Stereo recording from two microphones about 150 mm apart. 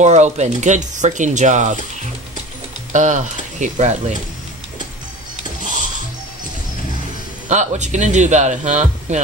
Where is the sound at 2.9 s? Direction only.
55° right (ahead or behind).